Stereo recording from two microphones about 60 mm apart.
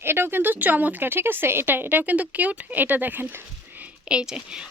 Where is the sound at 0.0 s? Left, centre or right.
Right.